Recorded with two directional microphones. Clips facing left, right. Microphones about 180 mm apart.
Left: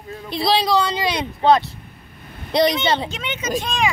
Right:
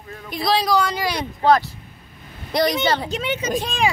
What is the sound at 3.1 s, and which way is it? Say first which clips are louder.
Speech: right 2 dB; 35° right (ahead or behind).